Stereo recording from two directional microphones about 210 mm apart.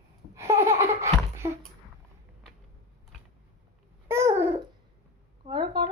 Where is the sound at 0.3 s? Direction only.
15° right (ahead or behind).